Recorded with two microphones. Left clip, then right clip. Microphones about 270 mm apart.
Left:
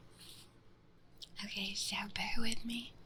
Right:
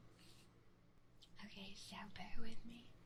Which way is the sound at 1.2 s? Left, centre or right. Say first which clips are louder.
Left 16 dB; centre.